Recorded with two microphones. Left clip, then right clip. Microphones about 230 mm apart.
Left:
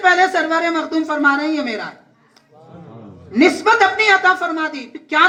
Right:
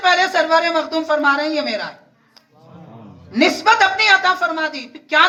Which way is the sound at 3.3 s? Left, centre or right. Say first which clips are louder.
Left 1 dB; right.